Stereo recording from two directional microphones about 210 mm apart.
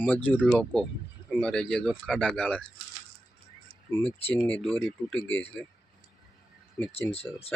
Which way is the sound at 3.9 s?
10° left (ahead or behind).